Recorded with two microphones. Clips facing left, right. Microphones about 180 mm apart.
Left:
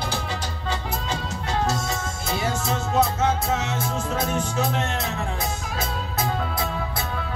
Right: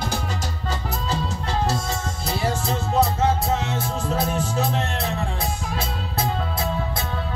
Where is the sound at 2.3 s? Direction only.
35° right (ahead or behind).